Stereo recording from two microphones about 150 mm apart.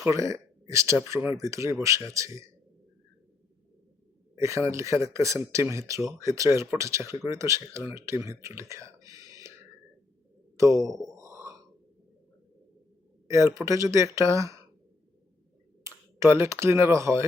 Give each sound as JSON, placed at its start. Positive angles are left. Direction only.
{"t": 0.0, "sound": "speech", "side_deg": -20}
{"t": 4.4, "sound": "speech", "side_deg": -20}
{"t": 11.1, "sound": "a sound", "side_deg": -20}
{"t": 13.2, "sound": "speech", "side_deg": -20}
{"t": 15.8, "sound": "speech", "side_deg": -15}